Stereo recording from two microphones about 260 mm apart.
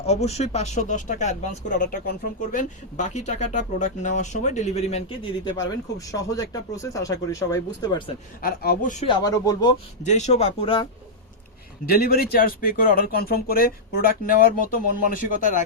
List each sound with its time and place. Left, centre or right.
0.1 s speech: left
8.4 s speech: left
9.0 s speech: centre
10.0 s speech: left
11.9 s speech: left